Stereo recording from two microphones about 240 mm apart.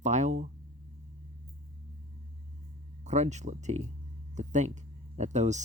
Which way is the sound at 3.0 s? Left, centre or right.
Right.